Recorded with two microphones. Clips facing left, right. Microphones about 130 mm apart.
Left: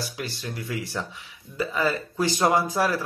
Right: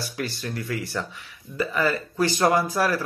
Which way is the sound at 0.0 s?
15° left (ahead or behind).